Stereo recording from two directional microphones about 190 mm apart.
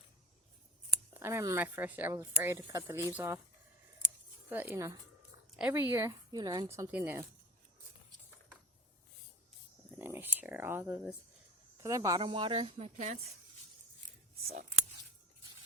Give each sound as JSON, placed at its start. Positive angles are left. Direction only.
{"t": 1.1, "sound": "a woman's voice", "side_deg": -15}
{"t": 4.4, "sound": "a woman's voice", "side_deg": -10}
{"t": 10.0, "sound": "a woman's voice", "side_deg": -10}